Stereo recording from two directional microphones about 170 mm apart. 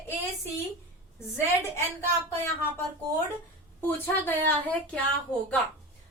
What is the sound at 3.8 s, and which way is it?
Speech, 10° left (ahead or behind).